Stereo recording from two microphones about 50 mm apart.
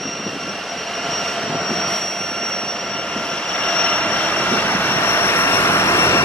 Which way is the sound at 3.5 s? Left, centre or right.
Centre.